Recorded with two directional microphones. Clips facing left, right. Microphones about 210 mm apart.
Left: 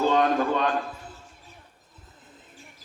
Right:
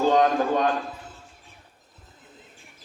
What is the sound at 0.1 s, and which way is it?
Speech, 40° right (ahead or behind).